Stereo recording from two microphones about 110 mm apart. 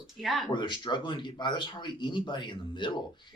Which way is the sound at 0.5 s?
45° left (ahead or behind).